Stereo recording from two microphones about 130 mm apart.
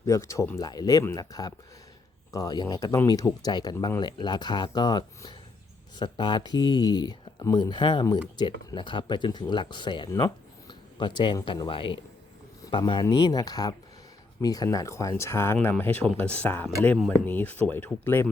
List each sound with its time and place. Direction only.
0.0 s speech: 25° left (ahead or behind)
16.0 s speech: 10° left (ahead or behind)